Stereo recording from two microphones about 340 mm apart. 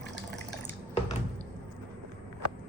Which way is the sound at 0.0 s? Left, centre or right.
Left.